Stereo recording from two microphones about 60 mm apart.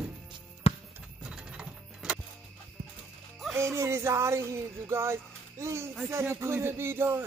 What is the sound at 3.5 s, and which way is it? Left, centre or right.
Speech, right.